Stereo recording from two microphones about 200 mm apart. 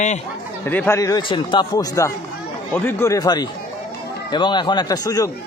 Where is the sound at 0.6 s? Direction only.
10° left (ahead or behind).